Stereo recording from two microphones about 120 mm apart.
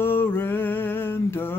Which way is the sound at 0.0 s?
20° left (ahead or behind).